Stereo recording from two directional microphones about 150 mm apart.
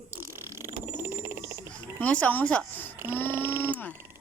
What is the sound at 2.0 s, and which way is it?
Speech, 10° left (ahead or behind).